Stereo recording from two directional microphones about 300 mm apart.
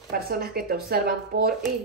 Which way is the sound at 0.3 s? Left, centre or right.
Right.